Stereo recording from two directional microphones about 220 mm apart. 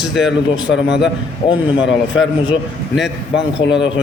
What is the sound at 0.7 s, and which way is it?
Speech, 50° left (ahead or behind).